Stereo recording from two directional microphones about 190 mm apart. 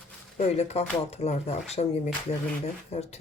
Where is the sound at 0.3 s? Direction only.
35° left (ahead or behind).